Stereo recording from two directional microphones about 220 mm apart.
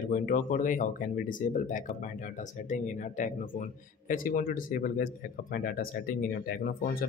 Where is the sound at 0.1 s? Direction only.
40° left (ahead or behind).